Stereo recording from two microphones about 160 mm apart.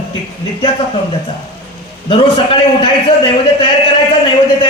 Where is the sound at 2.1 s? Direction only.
35° left (ahead or behind).